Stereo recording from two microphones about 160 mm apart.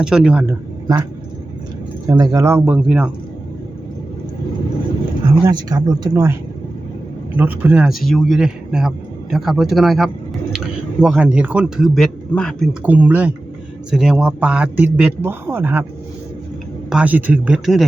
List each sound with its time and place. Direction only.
0.0 s a man's voice: 5° right (ahead or behind)
2.0 s a man's voice: 20° right (ahead or behind)
5.5 s speech: 25° right (ahead or behind)
7.3 s a man's voice: 10° right (ahead or behind); by 12.7 s 5° left (ahead or behind)
12.8 s a man's voice: 10° right (ahead or behind)
16.9 s a man's voice: 10° right (ahead or behind)